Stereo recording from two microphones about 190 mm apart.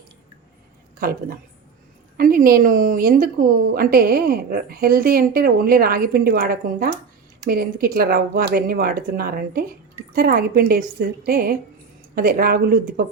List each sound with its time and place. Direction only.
0.9 s a woman's voice: 50° right (ahead or behind)